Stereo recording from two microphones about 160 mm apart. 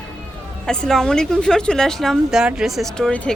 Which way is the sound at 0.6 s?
5° left (ahead or behind).